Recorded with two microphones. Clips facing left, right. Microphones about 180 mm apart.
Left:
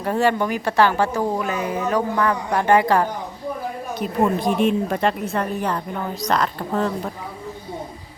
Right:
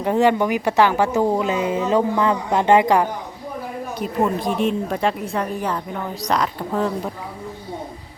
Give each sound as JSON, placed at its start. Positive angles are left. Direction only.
{"t": 0.0, "sound": "speech", "side_deg": -15}
{"t": 4.2, "sound": "speech", "side_deg": 0}